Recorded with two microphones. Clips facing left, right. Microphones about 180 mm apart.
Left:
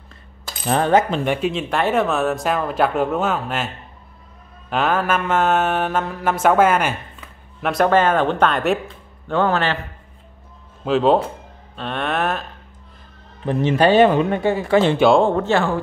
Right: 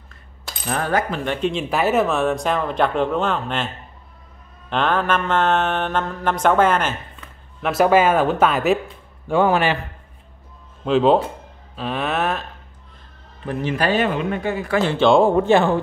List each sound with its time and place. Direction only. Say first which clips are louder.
0.7 s speech: left 5 dB; 25° left (ahead or behind)
1.5 s speech: even; centre (ahead or behind)
4.6 s mantra: even; 5° left (ahead or behind)
7.7 s speech: right 1 dB; 5° right (ahead or behind)
10.9 s speech: even; centre (ahead or behind)
13.5 s speech: left 5 dB; 25° left (ahead or behind)
15.0 s speech: right 2 dB; 5° left (ahead or behind)
15.2 s speech: right 3 dB; 15° right (ahead or behind)